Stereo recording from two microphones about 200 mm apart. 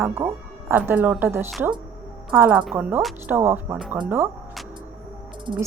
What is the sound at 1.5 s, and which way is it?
Speech, centre (ahead or behind).